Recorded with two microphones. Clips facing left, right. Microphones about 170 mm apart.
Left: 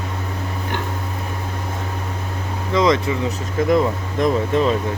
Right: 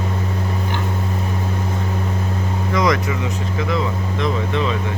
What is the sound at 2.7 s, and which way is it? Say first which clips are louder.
Speech: left 2 dB; 25° left (ahead or behind).